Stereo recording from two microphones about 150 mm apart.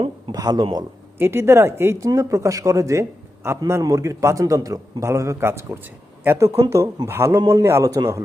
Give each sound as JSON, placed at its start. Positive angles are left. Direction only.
{"t": 0.0, "sound": "speech", "side_deg": -25}